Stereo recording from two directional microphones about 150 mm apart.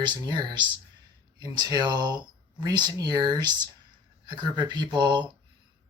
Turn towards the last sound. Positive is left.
turn(degrees=-30)  # may be behind; listen again after turning